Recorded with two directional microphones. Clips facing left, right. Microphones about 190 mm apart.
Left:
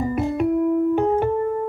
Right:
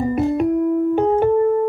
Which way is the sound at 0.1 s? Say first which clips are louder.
Right 3 dB; 35° right (ahead or behind).